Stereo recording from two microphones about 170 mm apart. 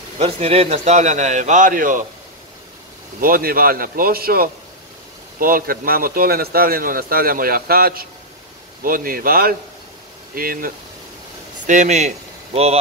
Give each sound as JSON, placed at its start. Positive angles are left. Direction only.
{"t": 0.2, "sound": "a man's voice", "side_deg": -35}
{"t": 3.2, "sound": "a man's voice", "side_deg": -55}
{"t": 11.6, "sound": "a man's voice", "side_deg": -45}